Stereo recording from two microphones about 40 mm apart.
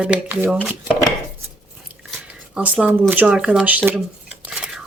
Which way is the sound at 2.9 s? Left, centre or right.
Right.